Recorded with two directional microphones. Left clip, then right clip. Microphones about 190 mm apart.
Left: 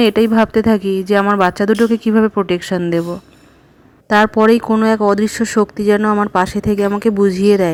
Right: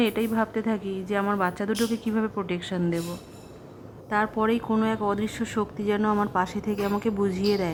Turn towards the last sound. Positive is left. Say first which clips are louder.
# left 13 dB
turn(degrees=25)  # may be behind; listen again after turning